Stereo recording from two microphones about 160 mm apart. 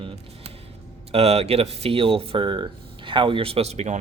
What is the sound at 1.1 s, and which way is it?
Speech, 40° right (ahead or behind).